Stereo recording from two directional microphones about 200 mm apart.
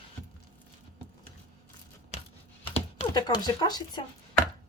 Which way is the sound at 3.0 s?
20° left (ahead or behind).